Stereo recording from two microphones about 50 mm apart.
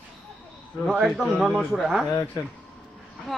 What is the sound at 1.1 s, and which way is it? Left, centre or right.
Speech, centre.